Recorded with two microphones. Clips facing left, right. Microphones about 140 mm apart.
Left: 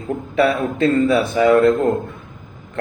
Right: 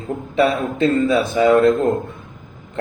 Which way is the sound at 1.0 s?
20° right (ahead or behind).